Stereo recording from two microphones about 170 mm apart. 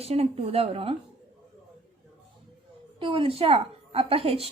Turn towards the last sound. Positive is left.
turn(degrees=-35)  # may be behind; listen again after turning